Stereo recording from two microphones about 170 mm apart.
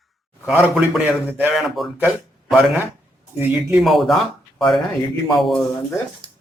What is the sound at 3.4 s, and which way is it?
Speech, 5° right (ahead or behind).